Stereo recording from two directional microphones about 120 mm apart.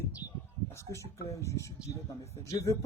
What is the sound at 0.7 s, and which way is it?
Speech, 20° left (ahead or behind).